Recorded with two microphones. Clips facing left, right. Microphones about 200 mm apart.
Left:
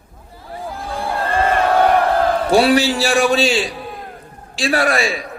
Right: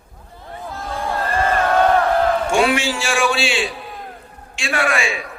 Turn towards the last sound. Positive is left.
turn(degrees=35)  # may be behind; listen again after turning